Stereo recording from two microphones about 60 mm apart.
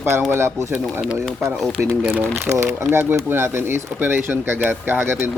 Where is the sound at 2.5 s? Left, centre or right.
Right.